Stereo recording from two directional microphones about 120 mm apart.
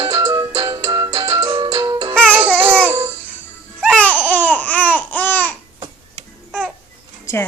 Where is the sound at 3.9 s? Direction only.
10° left (ahead or behind).